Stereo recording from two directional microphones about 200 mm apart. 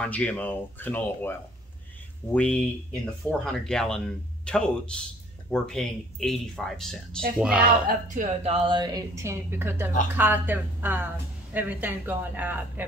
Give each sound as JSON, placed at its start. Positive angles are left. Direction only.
{"t": 0.0, "sound": "speech", "side_deg": 5}
{"t": 2.3, "sound": "speech", "side_deg": 5}
{"t": 7.9, "sound": "speech", "side_deg": -40}
{"t": 8.6, "sound": "speech", "side_deg": -20}